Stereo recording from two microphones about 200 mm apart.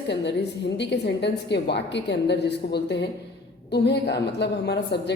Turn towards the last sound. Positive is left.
turn(degrees=55)  # may be behind; listen again after turning